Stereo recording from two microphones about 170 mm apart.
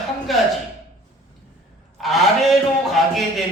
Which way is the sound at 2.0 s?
Centre (ahead or behind).